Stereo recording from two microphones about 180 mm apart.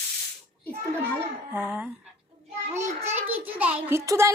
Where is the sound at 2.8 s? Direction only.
35° right (ahead or behind).